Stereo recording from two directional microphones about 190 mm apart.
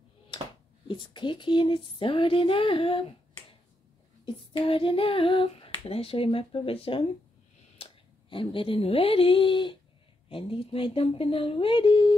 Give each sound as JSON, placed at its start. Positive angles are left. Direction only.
{"t": 0.8, "sound": "speech", "side_deg": 25}
{"t": 4.6, "sound": "a woman's voice", "side_deg": 30}